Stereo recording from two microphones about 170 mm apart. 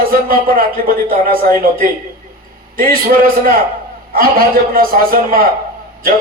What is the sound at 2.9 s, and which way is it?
A man's voice, 55° right (ahead or behind).